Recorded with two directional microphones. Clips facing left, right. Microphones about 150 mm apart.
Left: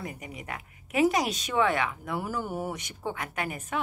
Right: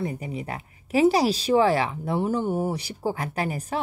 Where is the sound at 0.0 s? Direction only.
30° right (ahead or behind).